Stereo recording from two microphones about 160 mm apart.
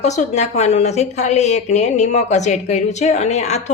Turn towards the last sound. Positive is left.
turn(degrees=45)  # may be behind; listen again after turning